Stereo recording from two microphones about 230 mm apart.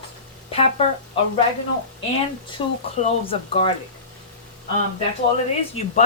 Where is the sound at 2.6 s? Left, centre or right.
Left.